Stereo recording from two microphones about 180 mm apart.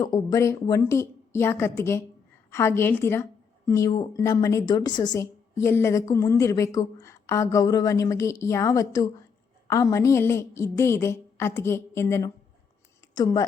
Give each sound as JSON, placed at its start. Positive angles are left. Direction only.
{"t": 0.0, "sound": "speech", "side_deg": 20}